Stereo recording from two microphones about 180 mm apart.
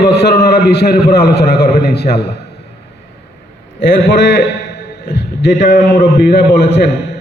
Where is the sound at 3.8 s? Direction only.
75° left (ahead or behind).